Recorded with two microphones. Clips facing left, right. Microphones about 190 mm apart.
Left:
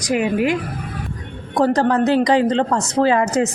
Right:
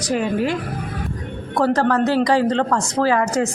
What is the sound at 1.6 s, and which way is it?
A woman's voice, 20° left (ahead or behind).